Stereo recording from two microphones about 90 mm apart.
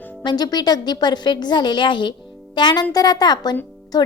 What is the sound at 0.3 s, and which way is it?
A woman's voice, 50° left (ahead or behind).